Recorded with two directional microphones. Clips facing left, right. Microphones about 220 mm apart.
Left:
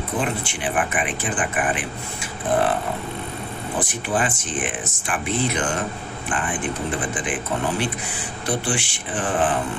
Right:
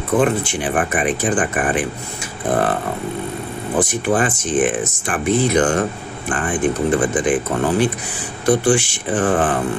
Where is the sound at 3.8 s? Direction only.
45° right (ahead or behind).